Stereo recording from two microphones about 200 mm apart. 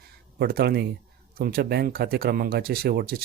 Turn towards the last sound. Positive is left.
turn(degrees=-50)  # may be behind; listen again after turning